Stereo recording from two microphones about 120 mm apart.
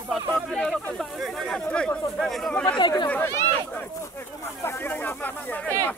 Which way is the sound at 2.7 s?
40° left (ahead or behind).